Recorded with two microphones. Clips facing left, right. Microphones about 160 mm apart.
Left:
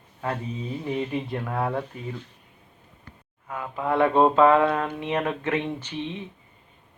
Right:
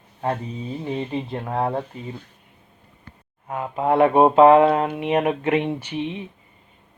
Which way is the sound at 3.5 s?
25° right (ahead or behind).